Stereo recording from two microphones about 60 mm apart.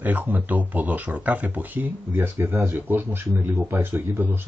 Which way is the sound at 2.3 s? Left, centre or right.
Right.